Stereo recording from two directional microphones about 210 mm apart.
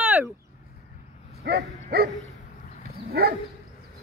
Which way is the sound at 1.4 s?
50° right (ahead or behind).